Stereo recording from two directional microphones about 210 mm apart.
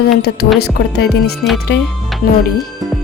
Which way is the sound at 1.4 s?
55° left (ahead or behind).